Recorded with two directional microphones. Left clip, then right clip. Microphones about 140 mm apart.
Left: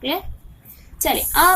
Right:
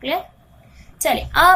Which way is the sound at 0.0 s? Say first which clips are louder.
Right 1 dB; 15° left (ahead or behind).